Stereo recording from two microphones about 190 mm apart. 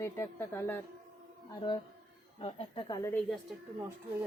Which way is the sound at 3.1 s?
Centre (ahead or behind).